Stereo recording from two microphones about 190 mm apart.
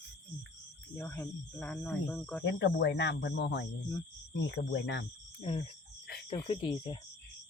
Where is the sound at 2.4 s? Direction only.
70° left (ahead or behind).